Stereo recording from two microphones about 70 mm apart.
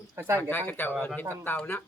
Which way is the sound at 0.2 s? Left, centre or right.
Right.